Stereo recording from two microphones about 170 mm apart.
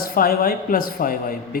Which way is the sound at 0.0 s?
60° left (ahead or behind).